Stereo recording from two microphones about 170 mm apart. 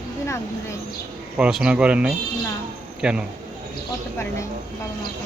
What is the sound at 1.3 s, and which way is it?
Speech, 5° right (ahead or behind).